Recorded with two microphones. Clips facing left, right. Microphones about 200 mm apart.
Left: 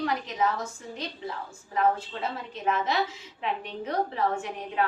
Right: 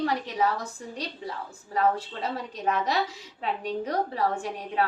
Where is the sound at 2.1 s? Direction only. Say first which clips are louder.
Right 1 dB; 40° right (ahead or behind).